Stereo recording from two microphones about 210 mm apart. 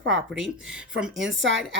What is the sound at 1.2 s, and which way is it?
Speech, 60° right (ahead or behind).